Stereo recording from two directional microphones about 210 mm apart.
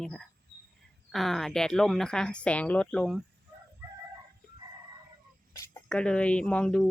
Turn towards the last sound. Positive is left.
turn(degrees=5)  # may be behind; listen again after turning